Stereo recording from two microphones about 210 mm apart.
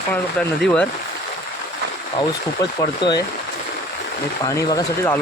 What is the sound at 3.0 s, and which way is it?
Speech, 20° left (ahead or behind).